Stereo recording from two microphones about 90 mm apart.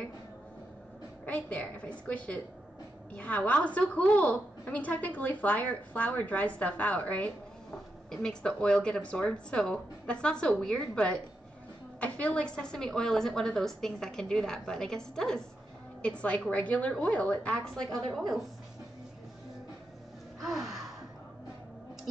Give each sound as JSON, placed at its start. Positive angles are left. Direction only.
{"t": 1.2, "sound": "a woman's voice", "side_deg": 15}
{"t": 20.4, "sound": "gasp", "side_deg": -5}